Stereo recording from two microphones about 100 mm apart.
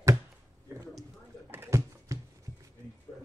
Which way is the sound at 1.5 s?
30° right (ahead or behind).